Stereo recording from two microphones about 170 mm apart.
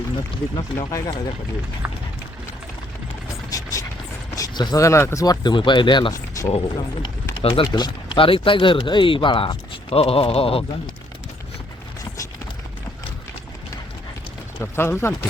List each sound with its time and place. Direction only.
0.5 s speech: 20° left (ahead or behind)
3.5 s vehicle: 20° left (ahead or behind)
4.4 s speech: 25° left (ahead or behind)
14.6 s speech: 15° left (ahead or behind)